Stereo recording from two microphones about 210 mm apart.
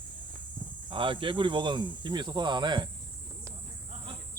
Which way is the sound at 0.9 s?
25° right (ahead or behind).